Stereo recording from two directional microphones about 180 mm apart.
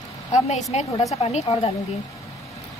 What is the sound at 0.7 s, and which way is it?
Speech, 35° left (ahead or behind).